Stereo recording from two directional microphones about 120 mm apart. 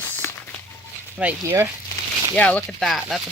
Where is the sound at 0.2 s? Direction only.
20° left (ahead or behind).